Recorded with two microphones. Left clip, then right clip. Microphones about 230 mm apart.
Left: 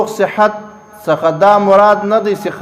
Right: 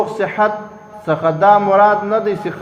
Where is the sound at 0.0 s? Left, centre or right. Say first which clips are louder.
Left 4 dB; left.